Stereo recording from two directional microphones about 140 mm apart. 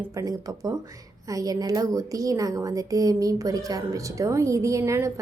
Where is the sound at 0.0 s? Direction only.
20° right (ahead or behind).